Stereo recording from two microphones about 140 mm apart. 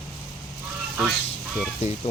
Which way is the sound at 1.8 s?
50° left (ahead or behind).